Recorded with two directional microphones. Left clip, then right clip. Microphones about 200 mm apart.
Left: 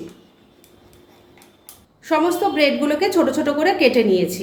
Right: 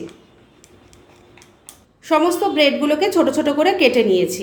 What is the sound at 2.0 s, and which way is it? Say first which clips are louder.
A woman's voice: right 2 dB; 15° right (ahead or behind).